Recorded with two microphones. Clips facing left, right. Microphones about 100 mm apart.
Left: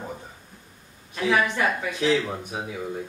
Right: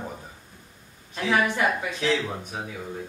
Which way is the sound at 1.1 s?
Centre (ahead or behind).